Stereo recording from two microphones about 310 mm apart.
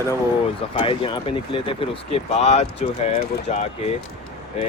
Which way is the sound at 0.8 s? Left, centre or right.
Centre.